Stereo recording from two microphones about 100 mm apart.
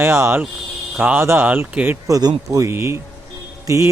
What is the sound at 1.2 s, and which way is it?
Speech, 25° right (ahead or behind).